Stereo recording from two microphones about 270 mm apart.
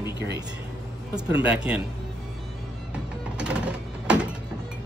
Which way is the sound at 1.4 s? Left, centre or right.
Centre.